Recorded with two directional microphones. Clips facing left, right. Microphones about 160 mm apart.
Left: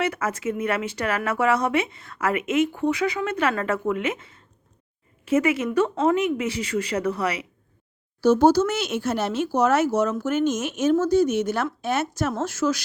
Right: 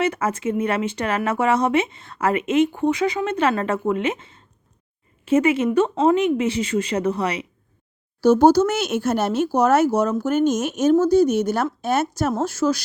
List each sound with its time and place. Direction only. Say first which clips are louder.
0.0 s speech: right 3 dB; 30° right (ahead or behind)
8.2 s speech: right 3 dB; 40° right (ahead or behind)